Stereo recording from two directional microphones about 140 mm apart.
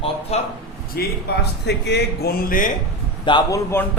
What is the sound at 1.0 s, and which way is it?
Speech, 90° left.